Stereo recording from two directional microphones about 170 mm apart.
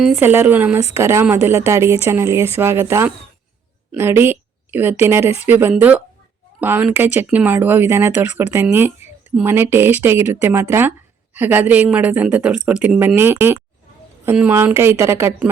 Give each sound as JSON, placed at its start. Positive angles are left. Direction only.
{"t": 0.2, "sound": "a woman's voice", "side_deg": -10}